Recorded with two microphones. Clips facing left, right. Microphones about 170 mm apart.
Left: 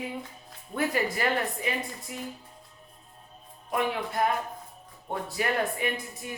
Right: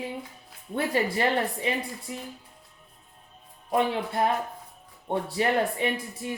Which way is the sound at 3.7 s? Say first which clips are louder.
Right 3 dB; 30° right (ahead or behind).